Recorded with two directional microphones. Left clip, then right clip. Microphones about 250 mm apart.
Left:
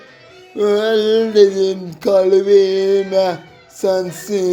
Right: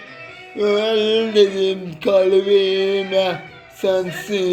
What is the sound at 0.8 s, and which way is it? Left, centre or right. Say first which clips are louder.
Mantra: left 3 dB; left.